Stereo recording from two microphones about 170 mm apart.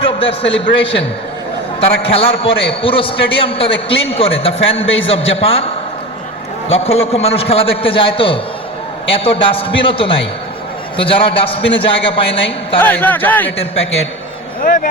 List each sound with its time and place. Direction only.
0.0 s a sound: 30° left (ahead or behind)
0.6 s a man's voice: 30° left (ahead or behind)
6.7 s a man's voice: 35° left (ahead or behind)
12.8 s a man's voice: 10° left (ahead or behind)
14.6 s speech: 55° left (ahead or behind)